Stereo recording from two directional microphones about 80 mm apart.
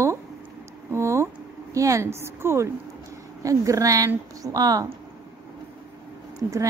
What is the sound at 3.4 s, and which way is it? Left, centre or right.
A woman's voice, right.